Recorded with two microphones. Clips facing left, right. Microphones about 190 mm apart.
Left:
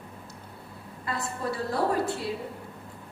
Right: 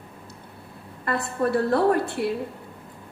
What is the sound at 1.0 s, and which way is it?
A woman's voice, 60° right (ahead or behind).